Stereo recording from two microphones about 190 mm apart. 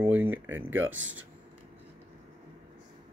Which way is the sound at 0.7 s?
90° right.